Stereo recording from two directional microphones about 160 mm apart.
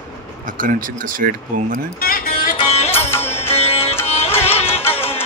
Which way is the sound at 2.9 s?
15° left (ahead or behind).